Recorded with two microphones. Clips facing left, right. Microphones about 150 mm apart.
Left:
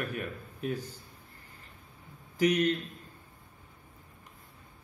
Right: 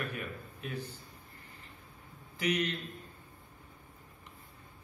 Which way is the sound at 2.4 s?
45° left (ahead or behind).